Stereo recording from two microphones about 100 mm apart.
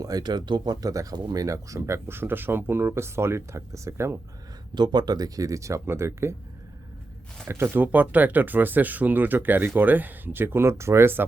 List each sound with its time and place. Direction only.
0.0 s speech: 40° right (ahead or behind)
4.7 s speech: 45° right (ahead or behind); by 6.3 s 25° right (ahead or behind)
7.4 s speech: 25° right (ahead or behind)